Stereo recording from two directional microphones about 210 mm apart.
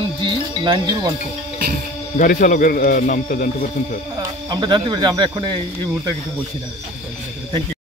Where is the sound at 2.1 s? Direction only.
40° left (ahead or behind).